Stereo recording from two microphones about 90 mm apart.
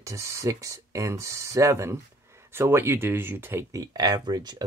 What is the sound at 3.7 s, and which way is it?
Speech, 45° right (ahead or behind).